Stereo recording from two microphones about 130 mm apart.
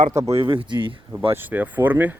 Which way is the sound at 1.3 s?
15° right (ahead or behind).